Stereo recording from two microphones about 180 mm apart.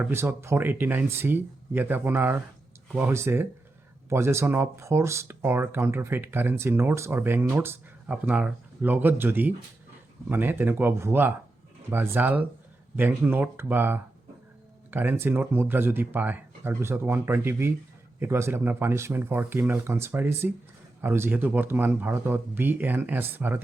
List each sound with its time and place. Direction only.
0.0 s speech: 15° right (ahead or behind)